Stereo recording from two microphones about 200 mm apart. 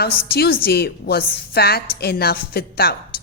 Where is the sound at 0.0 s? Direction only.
50° left (ahead or behind).